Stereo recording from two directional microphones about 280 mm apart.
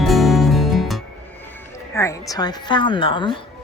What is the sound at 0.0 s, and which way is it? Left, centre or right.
Music, centre.